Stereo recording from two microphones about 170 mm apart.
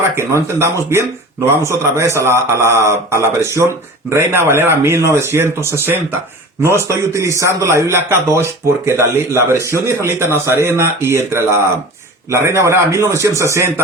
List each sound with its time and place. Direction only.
0.2 s a man's voice: 15° right (ahead or behind)